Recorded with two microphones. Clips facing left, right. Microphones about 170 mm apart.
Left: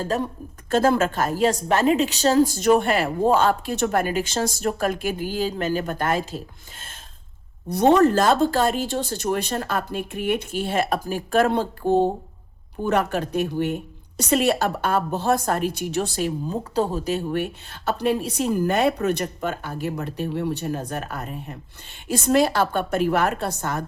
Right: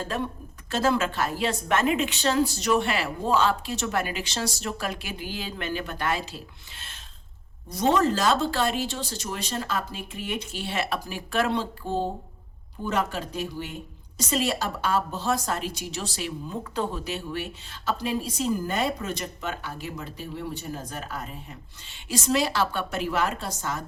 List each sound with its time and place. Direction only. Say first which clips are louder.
0.0 s speech: left 5 dB; 40° left (ahead or behind)
0.7 s a woman's voice: left 5 dB; 50° left (ahead or behind)
7.7 s a woman's voice: left 6 dB; 60° left (ahead or behind)